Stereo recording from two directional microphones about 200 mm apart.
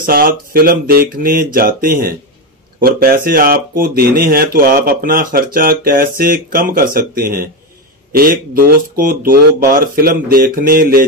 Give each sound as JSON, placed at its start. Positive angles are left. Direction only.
{"t": 0.0, "sound": "speech", "side_deg": -45}